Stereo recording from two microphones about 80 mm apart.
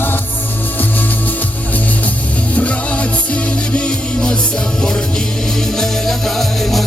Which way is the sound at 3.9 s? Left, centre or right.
Centre.